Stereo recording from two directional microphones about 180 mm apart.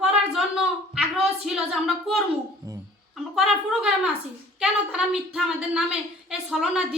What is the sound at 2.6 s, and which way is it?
Music, 15° right (ahead or behind).